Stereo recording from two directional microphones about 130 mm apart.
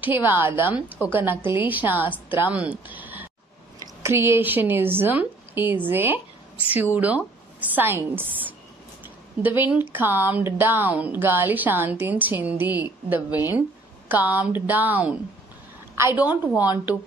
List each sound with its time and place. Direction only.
0.0 s speech: 15° right (ahead or behind)